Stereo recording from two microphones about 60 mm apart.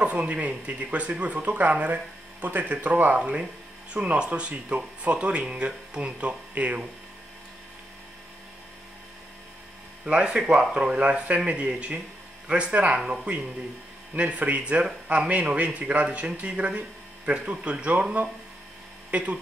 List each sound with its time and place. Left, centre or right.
0.0 s speech: right
10.0 s speech: centre
19.0 s speech: right